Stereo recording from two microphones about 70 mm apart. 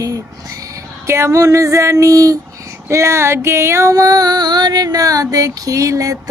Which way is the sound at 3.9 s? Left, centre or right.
Right.